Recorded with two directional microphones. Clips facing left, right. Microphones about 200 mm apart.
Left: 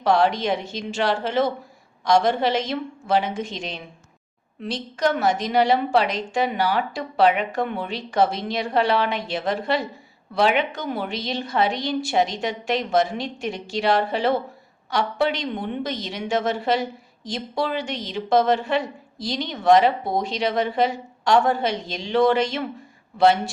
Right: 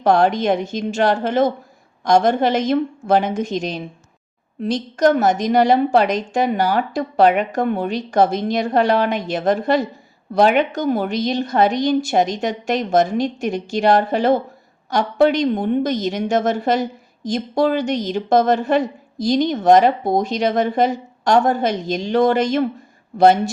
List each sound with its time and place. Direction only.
0.0 s a woman's voice: 50° right (ahead or behind)